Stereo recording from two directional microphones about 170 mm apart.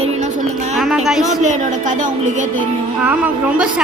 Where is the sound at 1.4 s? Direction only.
45° right (ahead or behind).